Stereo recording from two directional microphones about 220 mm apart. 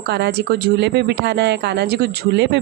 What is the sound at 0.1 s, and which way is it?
Speech, 50° right (ahead or behind).